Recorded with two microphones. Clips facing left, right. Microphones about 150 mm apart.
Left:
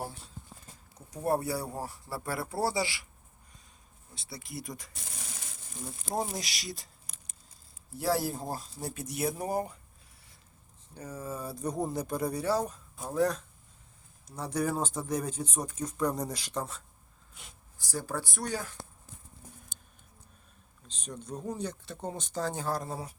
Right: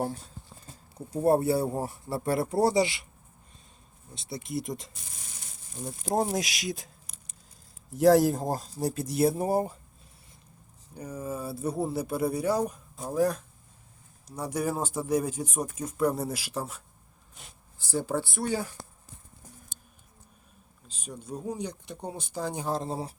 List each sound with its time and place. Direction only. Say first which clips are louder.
0.9 s speech: right 7 dB; 30° right (ahead or behind)
4.1 s speech: right 9 dB; 20° right (ahead or behind)
6.3 s speech: right 8 dB; 50° right (ahead or behind)
7.9 s speech: right 10 dB; 45° right (ahead or behind); by 9.7 s 25° right (ahead or behind)
10.9 s speech: right 4 dB; 10° right (ahead or behind)
17.9 s speech: right 6 dB; 20° right (ahead or behind)
20.8 s speech: right 1 dB; 10° right (ahead or behind); by 23.1 s 25° right (ahead or behind)